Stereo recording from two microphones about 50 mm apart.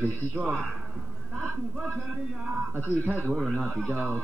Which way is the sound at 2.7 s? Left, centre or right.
Right.